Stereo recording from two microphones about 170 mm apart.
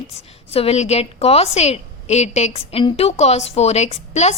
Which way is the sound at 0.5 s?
35° left (ahead or behind).